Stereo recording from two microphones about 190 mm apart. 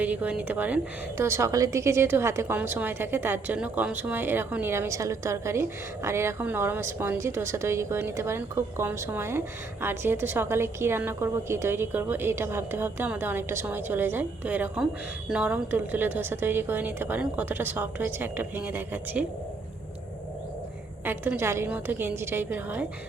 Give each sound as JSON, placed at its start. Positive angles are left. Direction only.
{"t": 0.0, "sound": "a woman's voice", "side_deg": -10}
{"t": 21.0, "sound": "a woman's voice", "side_deg": -10}